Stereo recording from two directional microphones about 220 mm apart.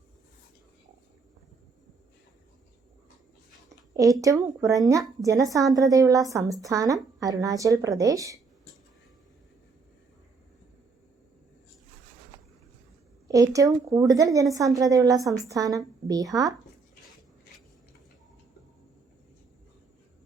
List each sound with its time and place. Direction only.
3.9 s a woman's voice: 15° right (ahead or behind)
13.2 s a woman's voice: 15° right (ahead or behind)